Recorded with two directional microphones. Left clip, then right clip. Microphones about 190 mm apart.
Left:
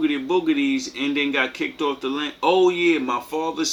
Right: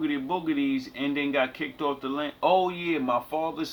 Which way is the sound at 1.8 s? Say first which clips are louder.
Left 4 dB; 35° right (ahead or behind).